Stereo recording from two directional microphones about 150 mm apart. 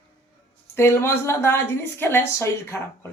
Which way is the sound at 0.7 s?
15° left (ahead or behind).